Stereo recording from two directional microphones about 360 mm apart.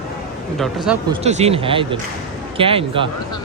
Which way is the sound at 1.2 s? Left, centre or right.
Centre.